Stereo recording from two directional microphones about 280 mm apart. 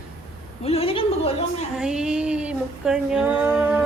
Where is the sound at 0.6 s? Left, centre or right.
Left.